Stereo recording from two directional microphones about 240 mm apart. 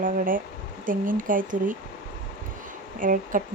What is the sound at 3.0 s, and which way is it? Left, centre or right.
Speech, right.